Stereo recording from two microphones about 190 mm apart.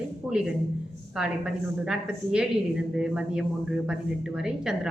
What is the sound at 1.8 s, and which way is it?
A woman's voice, 5° right (ahead or behind).